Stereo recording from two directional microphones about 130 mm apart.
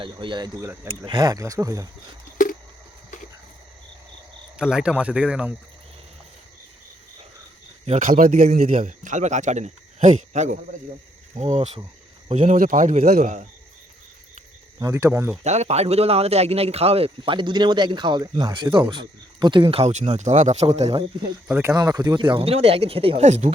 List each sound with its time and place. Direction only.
0.0 s speech: 40° right (ahead or behind)
2.4 s a sound: 90° left
4.5 s speech: 5° right (ahead or behind)
7.9 s speech: 90° right; by 12.5 s 55° right (ahead or behind)
12.5 s a man's voice: 85° right; by 13.5 s 70° right (ahead or behind)
14.8 s speech: 25° right (ahead or behind)
15.4 s a man's voice: 60° right (ahead or behind)
21.8 s a man's voice: 30° right (ahead or behind); by 23.2 s 45° right (ahead or behind)
23.2 s speech: 65° right (ahead or behind)